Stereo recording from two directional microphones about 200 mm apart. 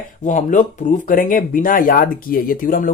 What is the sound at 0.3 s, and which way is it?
Speech, 40° left (ahead or behind).